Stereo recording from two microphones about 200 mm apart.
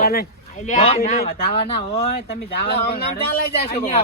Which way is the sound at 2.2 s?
50° left (ahead or behind).